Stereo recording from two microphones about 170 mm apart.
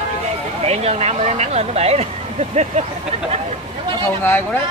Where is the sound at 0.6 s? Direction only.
40° right (ahead or behind).